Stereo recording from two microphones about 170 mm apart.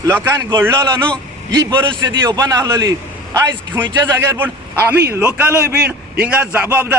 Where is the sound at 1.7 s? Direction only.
25° right (ahead or behind).